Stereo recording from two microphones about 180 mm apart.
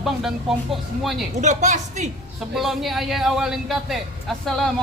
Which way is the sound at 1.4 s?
40° right (ahead or behind).